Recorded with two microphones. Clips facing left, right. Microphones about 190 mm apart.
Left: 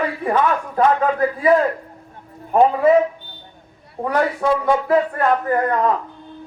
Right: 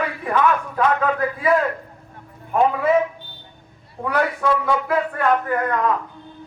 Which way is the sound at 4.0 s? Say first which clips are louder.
Left 2 dB; 40° left (ahead or behind).